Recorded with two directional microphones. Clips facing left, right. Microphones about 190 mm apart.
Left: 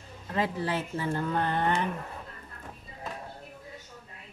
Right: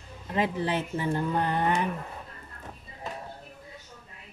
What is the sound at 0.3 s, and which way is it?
Speech, 20° right (ahead or behind).